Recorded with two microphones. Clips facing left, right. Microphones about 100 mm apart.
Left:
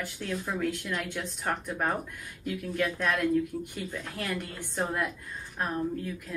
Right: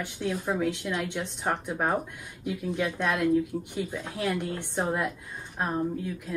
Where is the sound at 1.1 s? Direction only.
20° right (ahead or behind).